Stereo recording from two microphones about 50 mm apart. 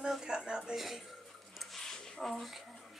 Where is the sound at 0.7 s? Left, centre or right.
Centre.